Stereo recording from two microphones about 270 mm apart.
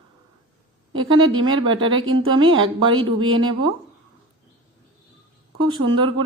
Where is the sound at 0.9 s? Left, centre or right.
Right.